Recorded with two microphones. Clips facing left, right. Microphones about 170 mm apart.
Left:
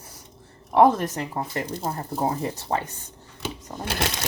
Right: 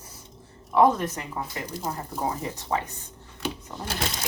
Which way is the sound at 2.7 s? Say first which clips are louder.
Left 1 dB; 45° left (ahead or behind).